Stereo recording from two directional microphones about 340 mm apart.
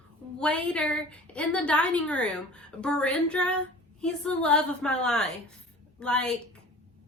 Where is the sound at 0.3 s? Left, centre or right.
Centre.